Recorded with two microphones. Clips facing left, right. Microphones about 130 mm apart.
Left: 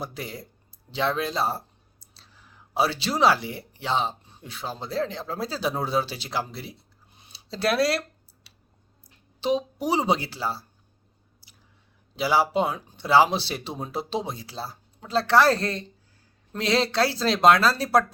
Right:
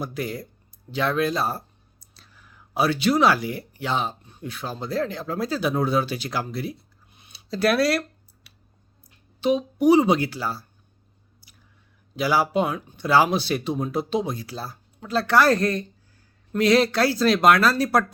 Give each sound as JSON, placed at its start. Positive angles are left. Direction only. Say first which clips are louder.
{"t": 0.0, "sound": "speech", "louder": "right 5 dB", "side_deg": 25}
{"t": 9.4, "sound": "speech", "louder": "right 5 dB", "side_deg": 30}
{"t": 12.1, "sound": "speech", "louder": "right 1 dB", "side_deg": 25}